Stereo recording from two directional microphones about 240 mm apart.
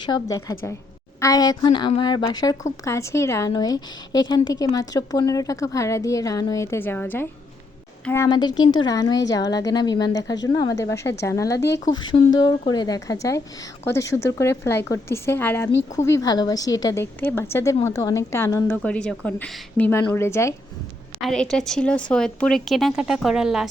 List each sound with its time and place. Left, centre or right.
0.0 s a woman's voice: centre